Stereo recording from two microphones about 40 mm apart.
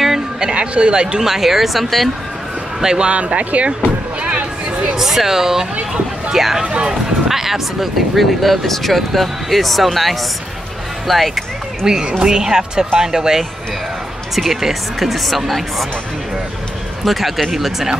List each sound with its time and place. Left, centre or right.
0.4 s speech: right
1.2 s speech: centre
2.8 s speech: centre
3.1 s a sound: right
4.9 s speech: centre
6.6 s speech: right
7.2 s speech: centre
11.8 s speech: centre
17.0 s speech: centre